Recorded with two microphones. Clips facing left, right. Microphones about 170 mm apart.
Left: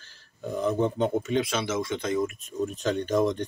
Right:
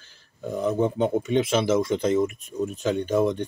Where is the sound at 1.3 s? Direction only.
30° right (ahead or behind).